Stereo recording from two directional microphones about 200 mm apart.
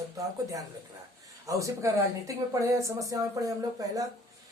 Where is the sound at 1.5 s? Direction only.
15° right (ahead or behind).